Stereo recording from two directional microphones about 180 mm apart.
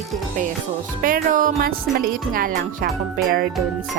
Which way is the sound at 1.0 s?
50° right (ahead or behind).